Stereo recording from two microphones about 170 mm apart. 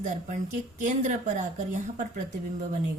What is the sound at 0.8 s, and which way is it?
Speech, 45° right (ahead or behind).